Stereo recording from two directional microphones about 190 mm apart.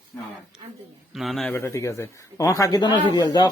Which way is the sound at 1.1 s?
Centre (ahead or behind).